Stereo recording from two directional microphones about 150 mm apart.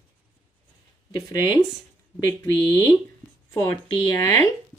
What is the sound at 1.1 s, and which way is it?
Speech, 25° left (ahead or behind).